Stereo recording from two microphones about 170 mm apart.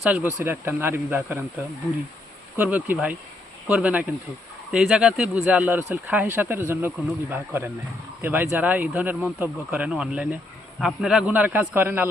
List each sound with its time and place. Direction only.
0.1 s speech: 10° right (ahead or behind)
2.6 s speech: 10° right (ahead or behind)